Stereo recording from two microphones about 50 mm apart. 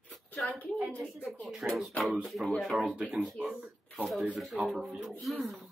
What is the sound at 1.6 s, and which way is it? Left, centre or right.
Speech, right.